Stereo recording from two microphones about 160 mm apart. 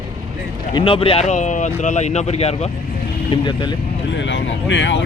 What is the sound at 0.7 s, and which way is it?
Speech, 35° left (ahead or behind).